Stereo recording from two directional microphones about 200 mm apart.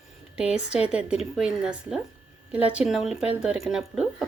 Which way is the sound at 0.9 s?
5° right (ahead or behind).